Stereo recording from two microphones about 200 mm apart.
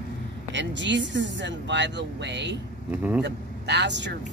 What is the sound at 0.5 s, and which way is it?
Speech, 65° right (ahead or behind).